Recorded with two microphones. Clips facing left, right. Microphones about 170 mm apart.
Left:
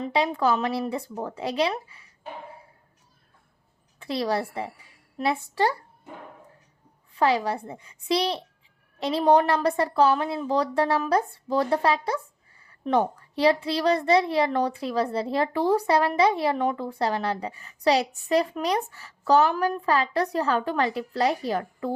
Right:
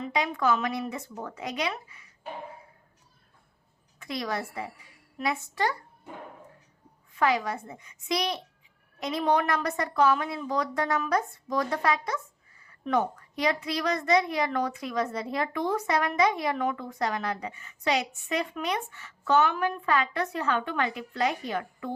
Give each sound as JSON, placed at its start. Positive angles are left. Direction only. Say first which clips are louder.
{"t": 0.0, "sound": "a woman's voice", "louder": "left 4 dB", "side_deg": 30}
{"t": 4.0, "sound": "a woman's voice", "louder": "left 6 dB", "side_deg": 30}
{"t": 7.1, "sound": "a woman's voice", "louder": "left 3 dB", "side_deg": 30}